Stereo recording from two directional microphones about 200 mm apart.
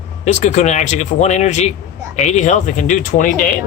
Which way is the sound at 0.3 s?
35° left (ahead or behind).